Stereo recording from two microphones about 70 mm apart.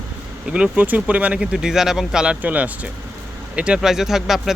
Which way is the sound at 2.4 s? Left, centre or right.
Right.